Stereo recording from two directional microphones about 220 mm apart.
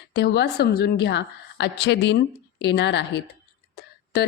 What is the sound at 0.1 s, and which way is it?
Speech, 50° left (ahead or behind).